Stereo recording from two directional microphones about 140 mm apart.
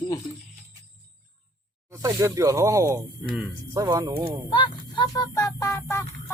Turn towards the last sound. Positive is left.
turn(degrees=20)  # may be behind; listen again after turning